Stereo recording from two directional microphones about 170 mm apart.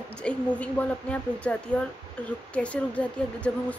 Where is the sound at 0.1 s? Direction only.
5° left (ahead or behind).